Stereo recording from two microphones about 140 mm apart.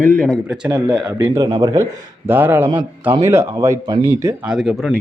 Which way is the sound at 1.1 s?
20° right (ahead or behind).